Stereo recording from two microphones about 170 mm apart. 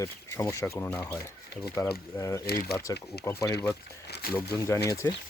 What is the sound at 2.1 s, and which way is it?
Speech, 20° left (ahead or behind).